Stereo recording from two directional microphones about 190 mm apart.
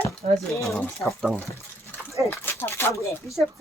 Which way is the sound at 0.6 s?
5° left (ahead or behind).